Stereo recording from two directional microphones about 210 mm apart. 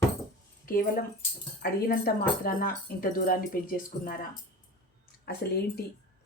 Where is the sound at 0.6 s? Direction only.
40° left (ahead or behind).